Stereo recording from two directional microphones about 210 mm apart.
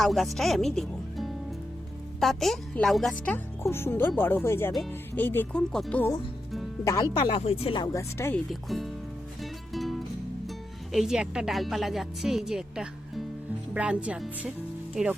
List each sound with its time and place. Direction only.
0.0 s speech: centre (ahead or behind)
6.8 s speech: 15° left (ahead or behind)
8.4 s a woman's voice: centre (ahead or behind)
9.4 s music: centre (ahead or behind)
10.9 s a woman's voice: centre (ahead or behind)